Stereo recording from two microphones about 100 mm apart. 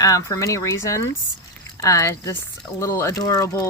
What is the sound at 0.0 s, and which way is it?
Speech, 35° left (ahead or behind).